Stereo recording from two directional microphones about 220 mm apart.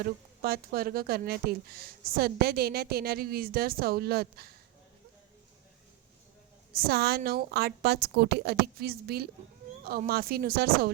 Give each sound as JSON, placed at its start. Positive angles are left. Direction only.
{"t": 0.0, "sound": "speech", "side_deg": -45}
{"t": 6.7, "sound": "speech", "side_deg": -45}